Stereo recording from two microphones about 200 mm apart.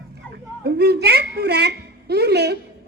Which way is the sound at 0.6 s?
55° right (ahead or behind).